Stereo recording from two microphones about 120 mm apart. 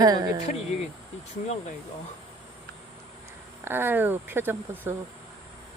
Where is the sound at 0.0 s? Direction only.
35° right (ahead or behind).